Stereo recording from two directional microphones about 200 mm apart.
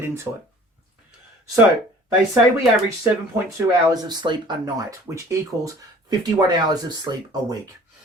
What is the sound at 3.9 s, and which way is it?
Speech, 20° right (ahead or behind).